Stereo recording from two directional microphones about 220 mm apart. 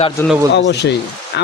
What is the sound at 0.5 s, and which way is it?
Speech, 50° left (ahead or behind).